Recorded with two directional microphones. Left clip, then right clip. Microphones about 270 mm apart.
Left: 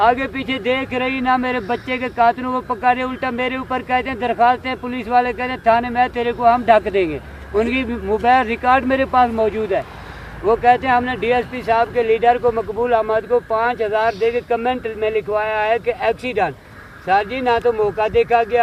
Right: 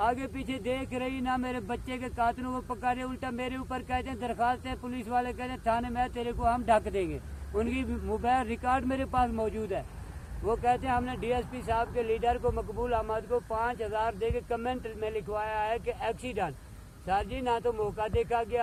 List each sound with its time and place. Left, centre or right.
0.0 s speech: left